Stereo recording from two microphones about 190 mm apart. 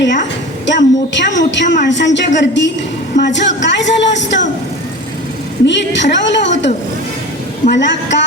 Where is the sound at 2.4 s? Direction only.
70° left (ahead or behind).